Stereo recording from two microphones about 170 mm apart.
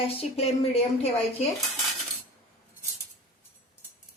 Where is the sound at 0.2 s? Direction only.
35° left (ahead or behind).